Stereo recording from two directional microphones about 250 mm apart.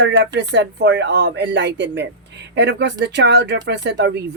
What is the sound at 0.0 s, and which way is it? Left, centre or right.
Speech, right.